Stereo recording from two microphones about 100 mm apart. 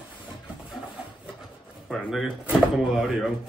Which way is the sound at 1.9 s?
Centre (ahead or behind).